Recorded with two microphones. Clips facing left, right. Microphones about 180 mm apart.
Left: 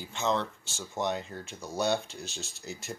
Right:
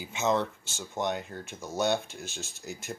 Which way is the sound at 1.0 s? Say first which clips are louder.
Even; centre (ahead or behind).